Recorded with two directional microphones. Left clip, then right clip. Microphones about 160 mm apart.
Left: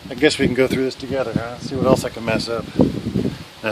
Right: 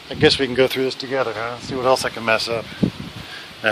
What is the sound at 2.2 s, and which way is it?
Speech, 30° left (ahead or behind).